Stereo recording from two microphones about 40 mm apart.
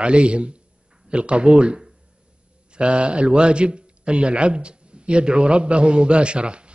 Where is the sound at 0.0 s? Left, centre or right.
Right.